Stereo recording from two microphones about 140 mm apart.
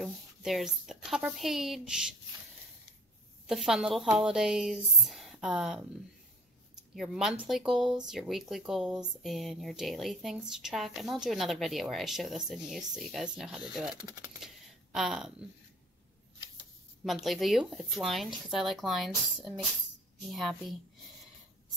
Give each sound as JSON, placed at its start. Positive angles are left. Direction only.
{"t": 0.0, "sound": "speech", "side_deg": 0}
{"t": 3.4, "sound": "speech", "side_deg": 0}
{"t": 7.0, "sound": "speech", "side_deg": -5}
{"t": 14.0, "sound": "speech", "side_deg": -25}
{"t": 15.0, "sound": "speech", "side_deg": -5}
{"t": 17.0, "sound": "speech", "side_deg": 0}